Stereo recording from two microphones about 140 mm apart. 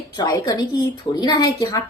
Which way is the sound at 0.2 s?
30° left (ahead or behind).